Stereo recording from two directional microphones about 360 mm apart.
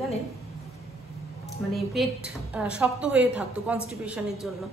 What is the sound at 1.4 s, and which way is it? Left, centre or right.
A woman's voice, centre.